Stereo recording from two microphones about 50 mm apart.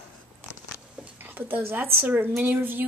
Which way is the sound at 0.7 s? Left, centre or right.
Left.